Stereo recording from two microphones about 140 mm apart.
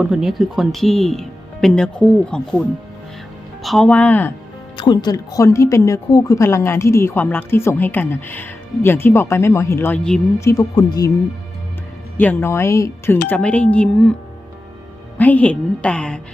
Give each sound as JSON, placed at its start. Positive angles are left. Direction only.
{"t": 0.0, "sound": "speech", "side_deg": -5}
{"t": 4.8, "sound": "speech", "side_deg": 30}
{"t": 12.1, "sound": "speech", "side_deg": 15}
{"t": 15.2, "sound": "speech", "side_deg": 10}